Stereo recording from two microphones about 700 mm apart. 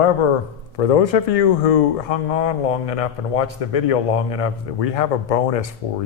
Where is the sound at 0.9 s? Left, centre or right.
Left.